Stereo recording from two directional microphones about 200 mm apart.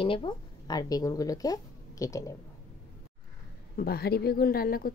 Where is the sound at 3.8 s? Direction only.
50° left (ahead or behind).